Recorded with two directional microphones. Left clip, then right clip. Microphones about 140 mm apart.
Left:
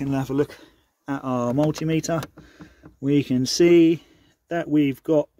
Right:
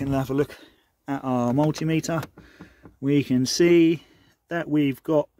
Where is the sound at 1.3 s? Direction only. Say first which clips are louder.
Left 1 dB; 55° right (ahead or behind); by 5.3 s 40° right (ahead or behind).